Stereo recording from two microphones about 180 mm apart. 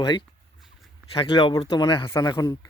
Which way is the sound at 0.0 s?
25° left (ahead or behind).